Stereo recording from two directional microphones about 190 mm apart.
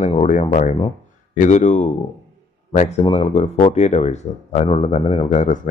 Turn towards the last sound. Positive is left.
turn(degrees=35)  # may be behind; listen again after turning